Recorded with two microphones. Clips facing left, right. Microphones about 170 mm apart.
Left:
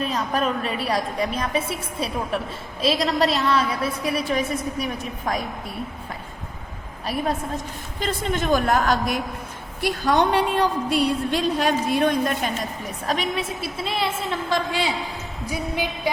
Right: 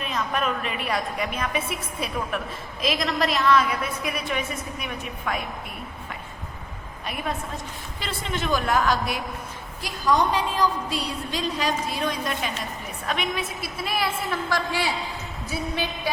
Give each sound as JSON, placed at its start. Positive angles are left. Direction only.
{"t": 0.0, "sound": "a woman's voice", "side_deg": 35}
{"t": 7.9, "sound": "a woman's voice", "side_deg": 45}
{"t": 9.8, "sound": "a woman's voice", "side_deg": 65}
{"t": 13.1, "sound": "a woman's voice", "side_deg": 30}
{"t": 15.4, "sound": "a sound", "side_deg": 15}